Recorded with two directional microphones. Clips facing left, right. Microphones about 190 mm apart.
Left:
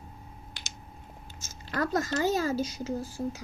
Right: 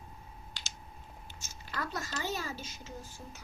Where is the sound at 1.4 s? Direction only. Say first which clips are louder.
Left 9 dB; 45° left (ahead or behind).